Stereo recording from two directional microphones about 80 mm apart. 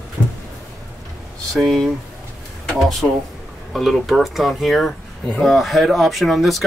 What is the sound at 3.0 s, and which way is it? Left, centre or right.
Speech, left.